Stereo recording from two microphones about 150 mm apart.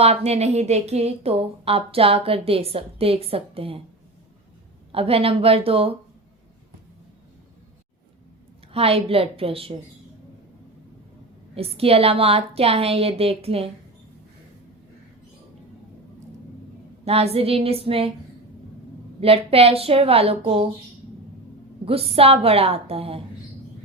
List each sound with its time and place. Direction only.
0.0 s a woman's voice: 45° right (ahead or behind)
4.9 s a woman's voice: 40° right (ahead or behind)
8.7 s a woman's voice: 40° right (ahead or behind)
11.5 s a woman's voice: 40° right (ahead or behind)
17.1 s a woman's voice: 40° right (ahead or behind)
19.2 s a woman's voice: 40° right (ahead or behind)
21.8 s a woman's voice: 40° right (ahead or behind)